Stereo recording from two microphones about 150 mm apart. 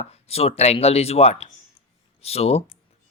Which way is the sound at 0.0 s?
45° left (ahead or behind).